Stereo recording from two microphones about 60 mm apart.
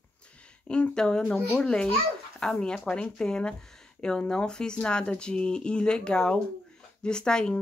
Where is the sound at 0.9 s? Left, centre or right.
Centre.